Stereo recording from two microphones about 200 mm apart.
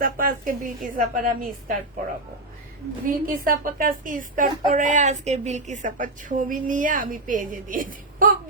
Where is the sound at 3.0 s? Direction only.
45° right (ahead or behind).